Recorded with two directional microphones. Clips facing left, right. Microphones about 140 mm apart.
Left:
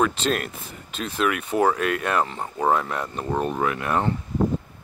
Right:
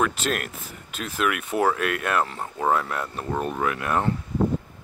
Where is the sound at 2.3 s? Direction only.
10° left (ahead or behind).